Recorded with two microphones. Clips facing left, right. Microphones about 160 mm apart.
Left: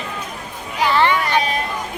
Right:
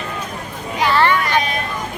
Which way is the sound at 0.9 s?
15° left (ahead or behind).